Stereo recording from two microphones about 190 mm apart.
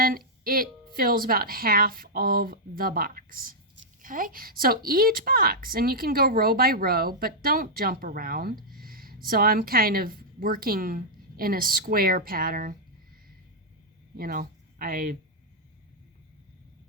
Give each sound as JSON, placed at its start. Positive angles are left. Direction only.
{"t": 0.4, "sound": "a woman's voice", "side_deg": -50}
{"t": 14.2, "sound": "speech", "side_deg": -50}